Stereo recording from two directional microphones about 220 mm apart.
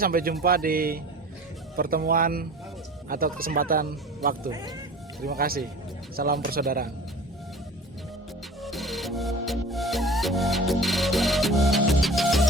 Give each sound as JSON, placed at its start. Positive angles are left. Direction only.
{"t": 0.0, "sound": "speech", "side_deg": -40}
{"t": 8.6, "sound": "music", "side_deg": 0}